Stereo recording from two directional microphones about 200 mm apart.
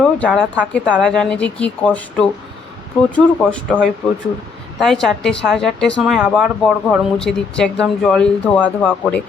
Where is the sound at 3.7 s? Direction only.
Centre (ahead or behind).